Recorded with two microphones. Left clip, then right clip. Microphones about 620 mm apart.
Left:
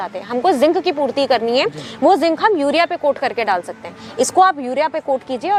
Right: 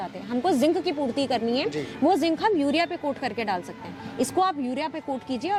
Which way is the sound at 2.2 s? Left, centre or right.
Left.